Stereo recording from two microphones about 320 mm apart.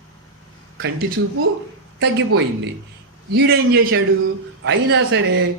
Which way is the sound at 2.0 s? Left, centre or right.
Right.